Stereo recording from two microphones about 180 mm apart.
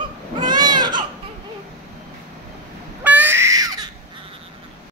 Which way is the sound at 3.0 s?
10° right (ahead or behind).